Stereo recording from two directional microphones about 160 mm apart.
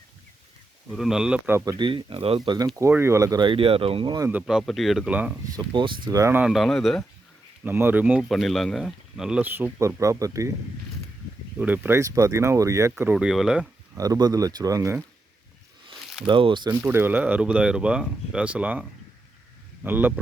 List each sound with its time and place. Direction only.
0.9 s speech: centre (ahead or behind)
1.8 s speech: 30° right (ahead or behind)
2.7 s speech: 15° right (ahead or behind)
4.3 s speech: 5° right (ahead or behind)
5.5 s speech: 25° right (ahead or behind)
6.4 s speech: centre (ahead or behind)
7.6 s speech: 15° right (ahead or behind)
11.5 s speech: 10° right (ahead or behind)
12.9 s speech: 10° right (ahead or behind)
13.9 s speech: 20° right (ahead or behind)
16.2 s speech: 30° right (ahead or behind)
16.8 s speech: 15° right (ahead or behind)